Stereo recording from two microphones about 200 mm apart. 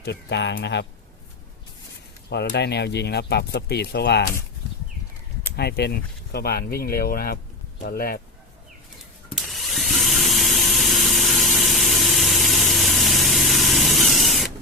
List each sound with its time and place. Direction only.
0.0 s speech: 60° left (ahead or behind)
2.3 s speech: 55° left (ahead or behind)
5.5 s speech: 55° left (ahead or behind)
9.3 s tools: centre (ahead or behind)